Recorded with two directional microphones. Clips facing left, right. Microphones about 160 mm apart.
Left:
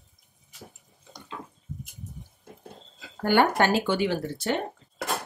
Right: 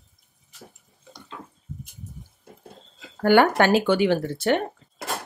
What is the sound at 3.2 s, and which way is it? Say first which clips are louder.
Speech: right 4 dB; 90° right.